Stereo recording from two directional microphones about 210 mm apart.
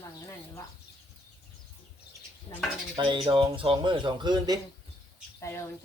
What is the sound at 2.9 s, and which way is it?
Speech, 20° right (ahead or behind).